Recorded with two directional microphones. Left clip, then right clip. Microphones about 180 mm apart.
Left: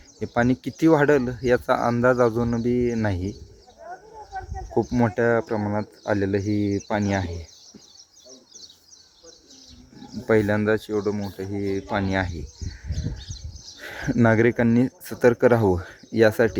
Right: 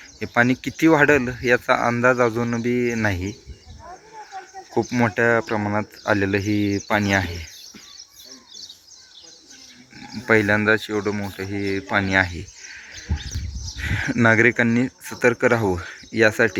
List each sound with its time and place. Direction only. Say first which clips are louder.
0.2 s speech: right 4 dB; 15° left (ahead or behind)
4.7 s speech: right 2 dB; 15° left (ahead or behind)
10.2 s speech: right 3 dB; 15° left (ahead or behind)
13.7 s speech: right 2 dB; 25° left (ahead or behind)